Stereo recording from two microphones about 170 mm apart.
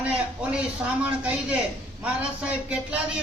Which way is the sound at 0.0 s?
5° right (ahead or behind).